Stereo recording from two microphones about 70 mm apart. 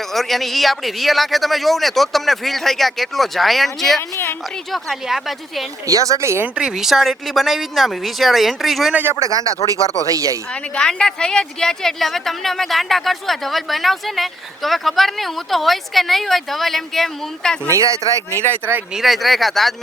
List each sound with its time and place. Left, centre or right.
0.1 s speech: centre
5.9 s speech: right
6.6 s speech: centre
9.2 s speech: right
9.6 s speech: left
10.1 s speech: right
10.8 s speech: centre
17.7 s speech: right
18.9 s speech: centre